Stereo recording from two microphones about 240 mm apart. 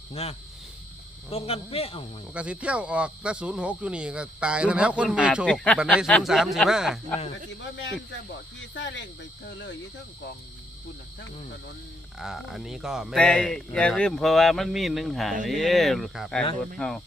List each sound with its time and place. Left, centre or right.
0.1 s a man's voice: left
2.3 s speech: centre
7.6 s speech: left
12.2 s speech: centre